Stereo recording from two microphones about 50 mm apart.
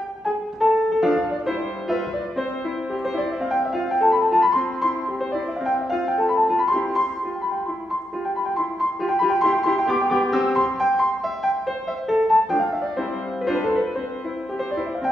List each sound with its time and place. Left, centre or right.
0.6 s music: centre
3.2 s music: centre
8.5 s music: centre